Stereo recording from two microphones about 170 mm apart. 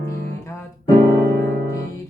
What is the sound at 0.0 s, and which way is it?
Music, 15° left (ahead or behind).